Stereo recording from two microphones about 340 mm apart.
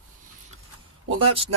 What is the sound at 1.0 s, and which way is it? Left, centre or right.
Speech, centre.